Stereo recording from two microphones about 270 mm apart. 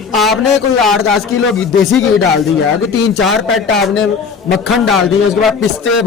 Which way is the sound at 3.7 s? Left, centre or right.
Centre.